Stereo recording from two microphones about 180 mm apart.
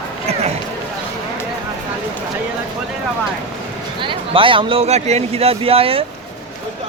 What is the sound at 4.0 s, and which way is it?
Speech, 30° right (ahead or behind).